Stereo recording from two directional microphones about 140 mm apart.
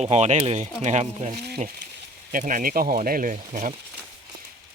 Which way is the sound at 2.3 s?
75° right (ahead or behind).